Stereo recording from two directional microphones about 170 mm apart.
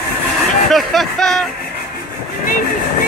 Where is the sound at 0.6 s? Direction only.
Centre (ahead or behind).